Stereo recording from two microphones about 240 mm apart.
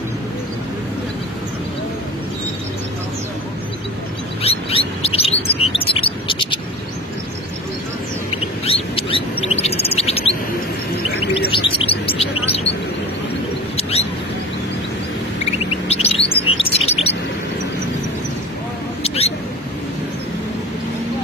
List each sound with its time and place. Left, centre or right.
4.4 s chirp: left
8.3 s rodents: left
9.6 s bird: left
11.5 s chirp: left
13.7 s bird: left
15.9 s chirp: left
16.7 s bird: left
19.0 s mouse: left